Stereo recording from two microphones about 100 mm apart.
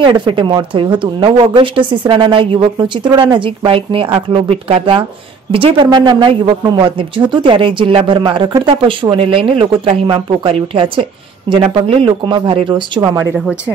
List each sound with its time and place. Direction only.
0.0 s speech: 55° right (ahead or behind)
5.9 s speech: 45° right (ahead or behind)
9.1 s speech: 65° right (ahead or behind)